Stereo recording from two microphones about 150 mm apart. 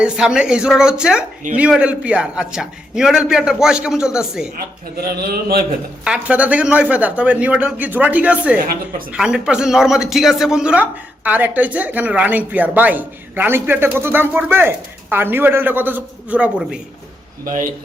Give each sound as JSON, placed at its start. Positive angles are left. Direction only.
{"t": 0.0, "sound": "a man's voice", "side_deg": -5}
{"t": 4.5, "sound": "a man's voice", "side_deg": -85}
{"t": 6.1, "sound": "a man's voice", "side_deg": -10}
{"t": 8.6, "sound": "speech", "side_deg": -75}
{"t": 9.1, "sound": "a man's voice", "side_deg": -5}
{"t": 17.4, "sound": "speech", "side_deg": -65}